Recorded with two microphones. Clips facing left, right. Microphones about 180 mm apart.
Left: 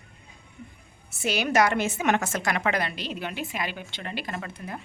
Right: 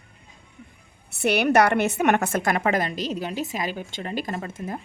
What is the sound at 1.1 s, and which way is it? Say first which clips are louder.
A woman's voice: right 5 dB; 65° right (ahead or behind).